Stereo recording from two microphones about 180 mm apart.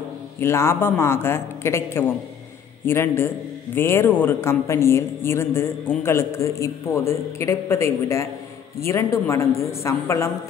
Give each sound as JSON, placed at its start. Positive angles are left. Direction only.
{"t": 0.4, "sound": "a woman's voice", "side_deg": 15}